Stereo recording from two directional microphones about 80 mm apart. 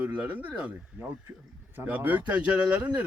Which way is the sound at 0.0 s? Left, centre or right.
Centre.